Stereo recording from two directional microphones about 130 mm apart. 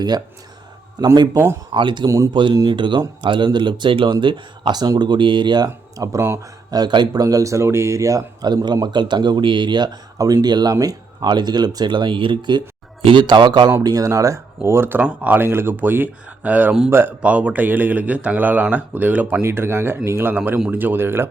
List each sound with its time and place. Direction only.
0.9 s speech: 30° right (ahead or behind)
2.0 s a man's voice: 25° right (ahead or behind)
2.3 s speech: 35° right (ahead or behind); by 6.7 s 20° right (ahead or behind)
6.7 s speech: 35° right (ahead or behind); by 21.2 s 15° right (ahead or behind)